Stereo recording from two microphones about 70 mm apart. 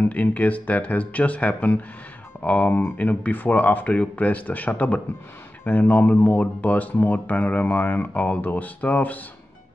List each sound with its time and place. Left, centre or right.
0.0 s speech: left